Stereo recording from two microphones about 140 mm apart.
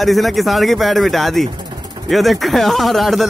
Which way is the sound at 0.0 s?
Centre (ahead or behind).